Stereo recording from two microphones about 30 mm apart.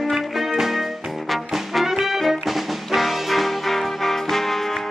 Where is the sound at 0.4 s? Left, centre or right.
Centre.